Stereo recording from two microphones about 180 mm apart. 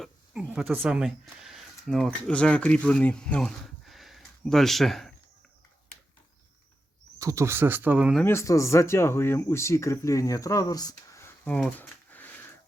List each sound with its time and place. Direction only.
0.0 s speech: 5° right (ahead or behind)
7.2 s speech: 15° right (ahead or behind)
8.2 s speech: 15° left (ahead or behind)